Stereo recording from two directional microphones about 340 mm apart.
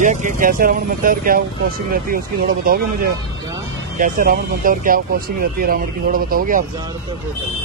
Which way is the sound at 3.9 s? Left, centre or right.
Right.